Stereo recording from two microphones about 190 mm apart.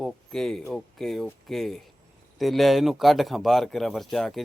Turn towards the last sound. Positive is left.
turn(degrees=0)  # may be behind; listen again after turning